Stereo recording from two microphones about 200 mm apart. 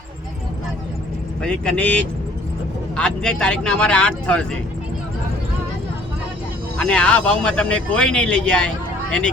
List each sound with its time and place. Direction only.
1.4 s speech: 5° left (ahead or behind)
6.7 s speech: 5° left (ahead or behind)